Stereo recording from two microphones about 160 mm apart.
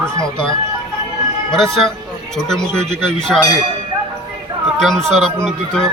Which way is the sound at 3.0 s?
5° left (ahead or behind).